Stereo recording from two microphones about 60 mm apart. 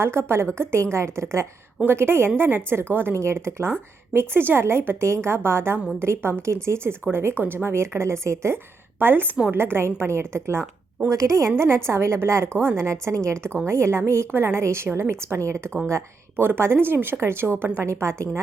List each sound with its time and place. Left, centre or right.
0.0 s speech: right
1.8 s speech: right
3.2 s speech: right
9.0 s speech: right
11.1 s a woman's voice: right
11.5 s speech: right
16.4 s speech: right
17.7 s speech: right